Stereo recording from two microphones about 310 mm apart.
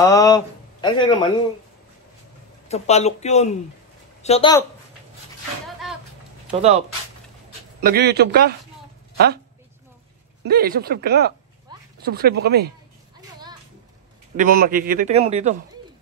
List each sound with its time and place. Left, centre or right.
0.0 s speech: centre
2.7 s a man's voice: left
7.8 s a man's voice: right
10.4 s a man's voice: right
14.3 s a man's voice: right